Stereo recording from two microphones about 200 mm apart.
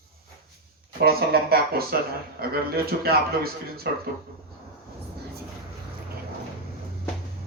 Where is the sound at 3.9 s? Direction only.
55° right (ahead or behind).